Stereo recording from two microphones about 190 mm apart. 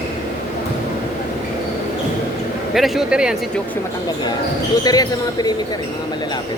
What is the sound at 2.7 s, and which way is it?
Speech, centre (ahead or behind).